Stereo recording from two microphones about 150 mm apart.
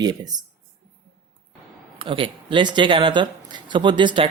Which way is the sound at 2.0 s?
35° right (ahead or behind).